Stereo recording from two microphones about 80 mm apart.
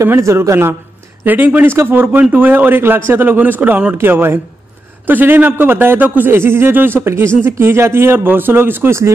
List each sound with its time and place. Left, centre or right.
0.0 s a man's voice: right